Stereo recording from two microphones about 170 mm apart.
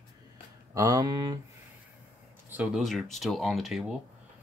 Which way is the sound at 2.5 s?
5° right (ahead or behind).